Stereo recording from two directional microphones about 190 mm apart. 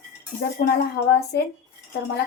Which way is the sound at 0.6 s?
60° left (ahead or behind).